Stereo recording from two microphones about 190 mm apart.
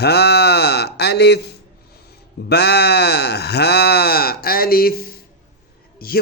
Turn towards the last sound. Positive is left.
turn(degrees=50)  # may be behind; listen again after turning